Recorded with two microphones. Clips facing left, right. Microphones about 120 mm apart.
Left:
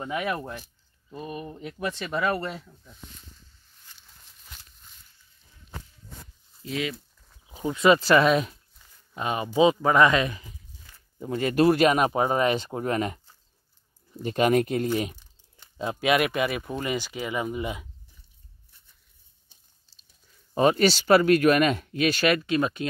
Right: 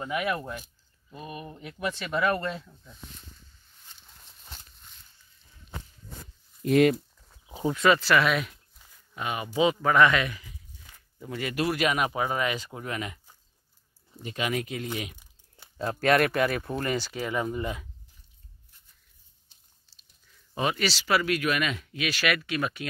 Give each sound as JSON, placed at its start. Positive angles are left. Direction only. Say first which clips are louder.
{"t": 0.0, "sound": "speech", "louder": "even", "side_deg": 25}
{"t": 6.6, "sound": "speech", "louder": "right 10 dB", "side_deg": -55}
{"t": 7.8, "sound": "speech", "louder": "left 4 dB", "side_deg": 25}
{"t": 14.2, "sound": "speech", "louder": "left 9 dB", "side_deg": 45}
{"t": 15.8, "sound": "speech", "louder": "even", "side_deg": 10}
{"t": 20.5, "sound": "speech", "louder": "left 8 dB", "side_deg": 40}
{"t": 22.3, "sound": "speech", "louder": "left 5 dB", "side_deg": 30}